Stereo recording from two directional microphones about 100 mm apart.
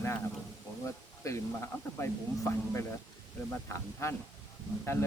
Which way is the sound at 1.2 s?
30° left (ahead or behind).